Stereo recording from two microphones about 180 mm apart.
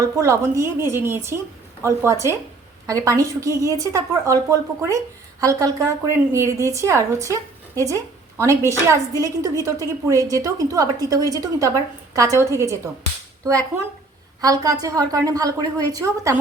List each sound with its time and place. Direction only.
0.0 s a woman's voice: 15° right (ahead or behind)